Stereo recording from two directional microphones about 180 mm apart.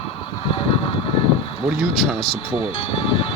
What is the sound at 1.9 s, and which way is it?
Speech, 30° left (ahead or behind).